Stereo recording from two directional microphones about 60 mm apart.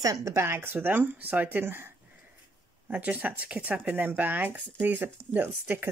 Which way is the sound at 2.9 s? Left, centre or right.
Right.